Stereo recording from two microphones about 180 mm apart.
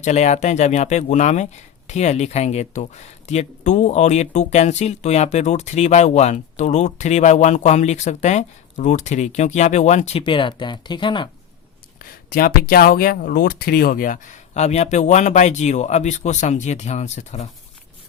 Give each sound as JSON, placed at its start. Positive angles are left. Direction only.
{"t": 0.0, "sound": "speech", "side_deg": 40}
{"t": 11.9, "sound": "speech", "side_deg": 55}